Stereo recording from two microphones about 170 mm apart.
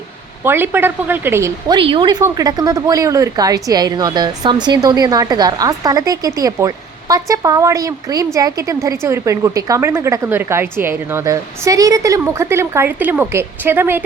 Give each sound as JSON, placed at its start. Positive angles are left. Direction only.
{"t": 0.4, "sound": "a woman's voice", "side_deg": -10}